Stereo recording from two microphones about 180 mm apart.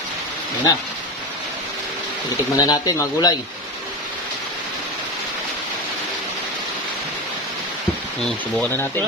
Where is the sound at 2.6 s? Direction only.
20° left (ahead or behind).